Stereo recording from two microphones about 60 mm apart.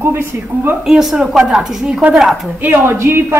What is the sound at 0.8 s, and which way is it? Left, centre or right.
A woman's voice, centre.